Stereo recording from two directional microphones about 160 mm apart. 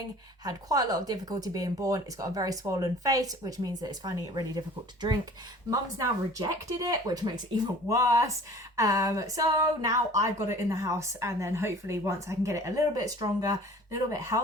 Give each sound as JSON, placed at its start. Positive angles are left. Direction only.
{"t": 0.4, "sound": "a woman's voice", "side_deg": -25}